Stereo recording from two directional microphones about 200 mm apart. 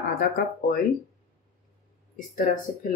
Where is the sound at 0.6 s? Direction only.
50° left (ahead or behind).